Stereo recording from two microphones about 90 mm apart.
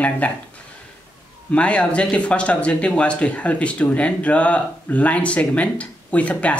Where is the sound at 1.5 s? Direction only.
15° left (ahead or behind).